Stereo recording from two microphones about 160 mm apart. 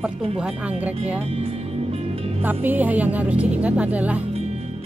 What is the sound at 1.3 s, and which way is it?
Music, 35° right (ahead or behind).